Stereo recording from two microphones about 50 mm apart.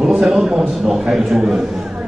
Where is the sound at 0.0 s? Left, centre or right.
Centre.